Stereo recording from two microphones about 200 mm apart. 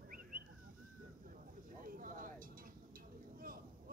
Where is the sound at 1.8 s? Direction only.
45° right (ahead or behind).